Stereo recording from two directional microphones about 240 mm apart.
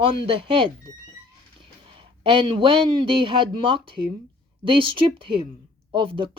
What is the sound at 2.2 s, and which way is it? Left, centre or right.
A woman's voice, right.